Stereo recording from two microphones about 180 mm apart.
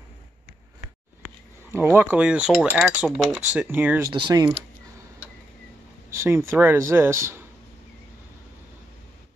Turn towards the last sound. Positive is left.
turn(degrees=-15)  # may be behind; listen again after turning